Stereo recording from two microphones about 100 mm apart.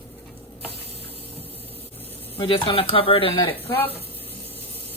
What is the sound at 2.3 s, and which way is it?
Speech, 60° left (ahead or behind).